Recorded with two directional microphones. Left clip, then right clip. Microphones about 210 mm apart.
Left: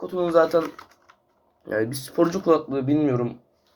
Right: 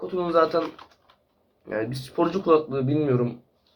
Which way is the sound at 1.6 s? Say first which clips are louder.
Left 3 dB; 40° left (ahead or behind).